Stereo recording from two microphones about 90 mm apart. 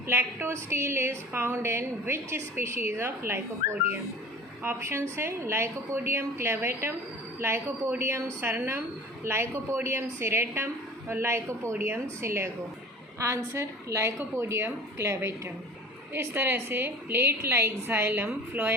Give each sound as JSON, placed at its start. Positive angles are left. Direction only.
{"t": 0.1, "sound": "a woman's voice", "side_deg": -25}